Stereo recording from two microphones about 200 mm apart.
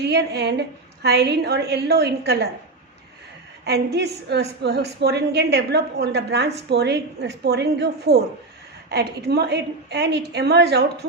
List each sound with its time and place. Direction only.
0.0 s a woman's voice: 55° right (ahead or behind)
3.6 s a woman's voice: 55° right (ahead or behind)